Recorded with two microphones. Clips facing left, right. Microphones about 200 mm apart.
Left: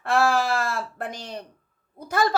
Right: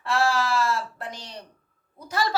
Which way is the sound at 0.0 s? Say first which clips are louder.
Left 3 dB; 55° left (ahead or behind).